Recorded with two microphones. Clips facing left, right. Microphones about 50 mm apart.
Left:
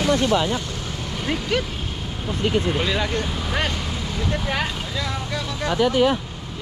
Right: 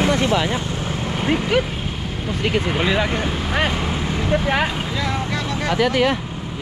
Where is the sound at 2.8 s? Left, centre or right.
Centre.